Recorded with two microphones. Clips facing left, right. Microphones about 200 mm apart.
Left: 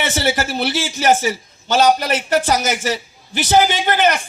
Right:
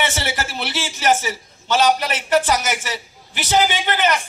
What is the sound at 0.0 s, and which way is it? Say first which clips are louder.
A man's voice: left 4 dB; 40° left (ahead or behind).